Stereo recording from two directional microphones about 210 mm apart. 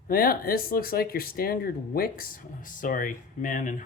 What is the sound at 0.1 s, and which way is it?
Speech, 45° left (ahead or behind).